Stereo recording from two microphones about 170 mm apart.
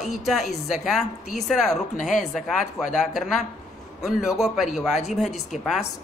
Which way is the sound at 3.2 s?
Centre (ahead or behind).